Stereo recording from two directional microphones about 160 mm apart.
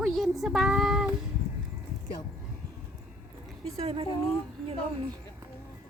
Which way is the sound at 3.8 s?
35° right (ahead or behind).